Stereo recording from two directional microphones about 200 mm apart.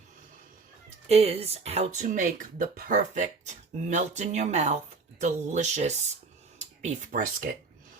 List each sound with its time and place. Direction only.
1.0 s speech: 30° right (ahead or behind)